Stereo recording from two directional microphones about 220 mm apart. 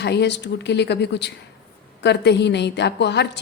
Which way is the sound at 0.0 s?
50° left (ahead or behind).